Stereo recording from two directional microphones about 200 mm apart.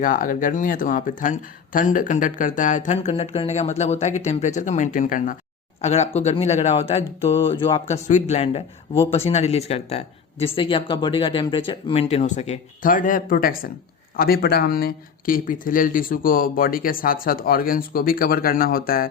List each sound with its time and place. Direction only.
0.0 s speech: 45° left (ahead or behind)